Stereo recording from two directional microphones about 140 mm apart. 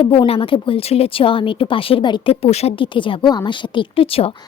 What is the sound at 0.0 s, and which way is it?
A woman's voice, 40° left (ahead or behind).